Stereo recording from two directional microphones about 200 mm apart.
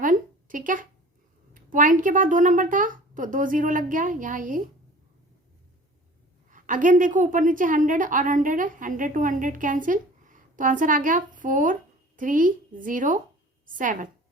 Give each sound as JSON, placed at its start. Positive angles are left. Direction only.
{"t": 0.0, "sound": "a sound", "side_deg": -40}
{"t": 1.5, "sound": "a woman's voice", "side_deg": -40}
{"t": 6.5, "sound": "a woman's voice", "side_deg": -40}